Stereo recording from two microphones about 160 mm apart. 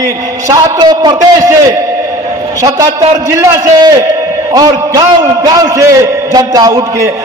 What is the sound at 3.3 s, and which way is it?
A man's voice, 20° right (ahead or behind).